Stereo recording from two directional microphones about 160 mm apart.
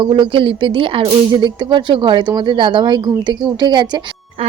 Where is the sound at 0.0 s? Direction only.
30° right (ahead or behind).